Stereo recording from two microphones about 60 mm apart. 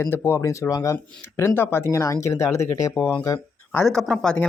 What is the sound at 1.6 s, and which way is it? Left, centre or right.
Speech, left.